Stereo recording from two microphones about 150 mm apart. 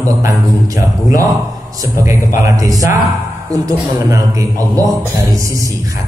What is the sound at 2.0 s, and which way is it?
A man's voice, 20° right (ahead or behind).